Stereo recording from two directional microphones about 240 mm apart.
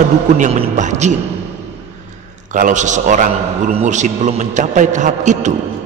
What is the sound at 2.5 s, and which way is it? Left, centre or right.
A man's voice, right.